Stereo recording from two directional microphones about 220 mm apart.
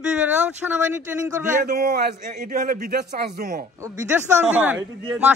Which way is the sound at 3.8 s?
10° right (ahead or behind).